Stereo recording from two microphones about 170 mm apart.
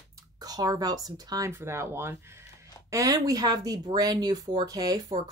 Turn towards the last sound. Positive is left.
turn(degrees=-20)  # may be behind; listen again after turning